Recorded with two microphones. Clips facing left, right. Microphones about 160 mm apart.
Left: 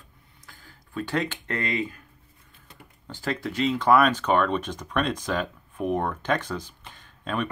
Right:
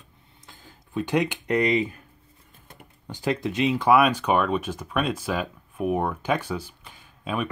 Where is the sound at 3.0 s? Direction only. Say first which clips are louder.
Right 4 dB; 15° right (ahead or behind).